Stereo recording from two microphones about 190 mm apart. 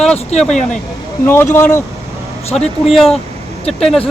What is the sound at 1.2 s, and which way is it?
Speech, 10° left (ahead or behind).